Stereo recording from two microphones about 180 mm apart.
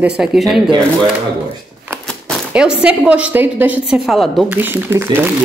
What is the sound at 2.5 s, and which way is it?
A woman's voice, 5° right (ahead or behind).